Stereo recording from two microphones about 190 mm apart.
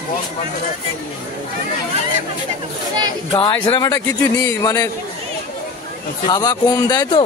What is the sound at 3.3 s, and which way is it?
Speech, 20° left (ahead or behind).